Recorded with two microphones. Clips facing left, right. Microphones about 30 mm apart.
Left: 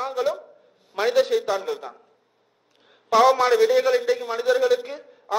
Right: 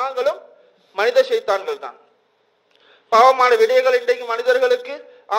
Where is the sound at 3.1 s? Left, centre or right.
Right.